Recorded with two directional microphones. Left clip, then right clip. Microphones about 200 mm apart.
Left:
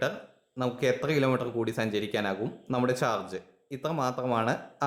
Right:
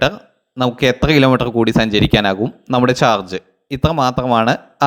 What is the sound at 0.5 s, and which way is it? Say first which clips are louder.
Speech: right 12 dB; 35° right (ahead or behind).